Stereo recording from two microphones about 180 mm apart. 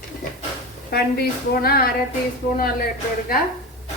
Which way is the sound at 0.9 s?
60° left (ahead or behind).